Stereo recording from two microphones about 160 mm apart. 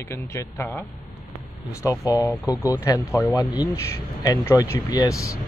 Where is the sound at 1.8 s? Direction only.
20° left (ahead or behind).